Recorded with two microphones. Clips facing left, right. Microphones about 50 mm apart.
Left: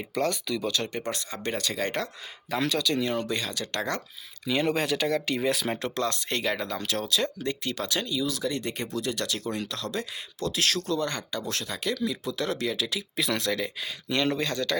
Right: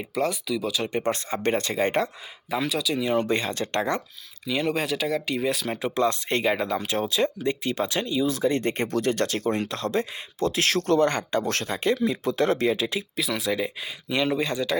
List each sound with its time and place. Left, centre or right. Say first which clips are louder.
0.0 s speech: right 2 dB; centre
0.9 s speech: right 7 dB; right
2.5 s speech: right 1 dB; centre
3.2 s speech: right 6 dB; right
4.4 s speech: even; centre
5.8 s speech: right 5 dB; centre
10.8 s speech: right 8 dB; right
13.1 s speech: left 3 dB; centre
13.5 s speech: right 3 dB; centre